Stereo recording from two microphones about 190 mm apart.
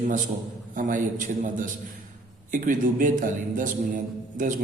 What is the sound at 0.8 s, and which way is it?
A man's voice, 45° right (ahead or behind).